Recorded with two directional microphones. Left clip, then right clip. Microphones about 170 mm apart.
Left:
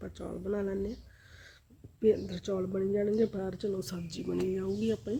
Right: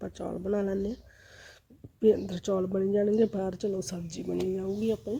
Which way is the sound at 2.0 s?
30° right (ahead or behind).